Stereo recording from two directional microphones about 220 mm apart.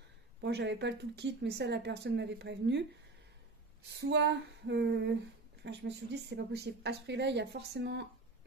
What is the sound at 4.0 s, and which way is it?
Speech, 50° right (ahead or behind).